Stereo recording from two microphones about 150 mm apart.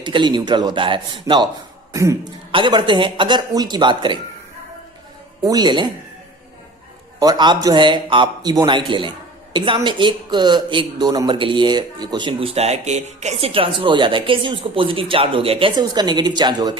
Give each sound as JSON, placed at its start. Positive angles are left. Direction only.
{"t": 0.0, "sound": "a man's voice", "side_deg": -30}
{"t": 1.9, "sound": "throat clearing", "side_deg": -20}
{"t": 2.5, "sound": "speech", "side_deg": -35}
{"t": 5.4, "sound": "a man's voice", "side_deg": -25}
{"t": 7.2, "sound": "a man's voice", "side_deg": -30}